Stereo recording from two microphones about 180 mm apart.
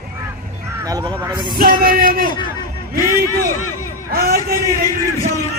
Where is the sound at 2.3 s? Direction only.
25° left (ahead or behind).